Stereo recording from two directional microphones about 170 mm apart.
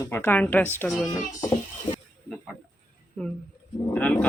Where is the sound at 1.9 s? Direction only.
30° left (ahead or behind).